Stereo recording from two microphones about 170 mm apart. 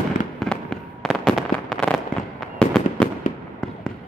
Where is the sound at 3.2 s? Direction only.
50° left (ahead or behind).